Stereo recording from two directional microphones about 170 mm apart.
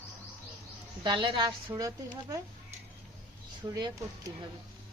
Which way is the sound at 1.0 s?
30° right (ahead or behind).